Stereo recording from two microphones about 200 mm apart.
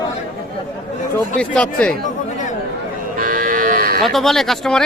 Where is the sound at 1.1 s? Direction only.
5° left (ahead or behind).